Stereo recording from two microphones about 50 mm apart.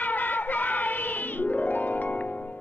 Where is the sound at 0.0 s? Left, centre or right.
Left.